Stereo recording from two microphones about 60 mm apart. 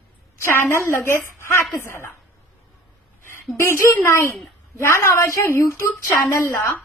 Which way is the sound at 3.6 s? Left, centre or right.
Left.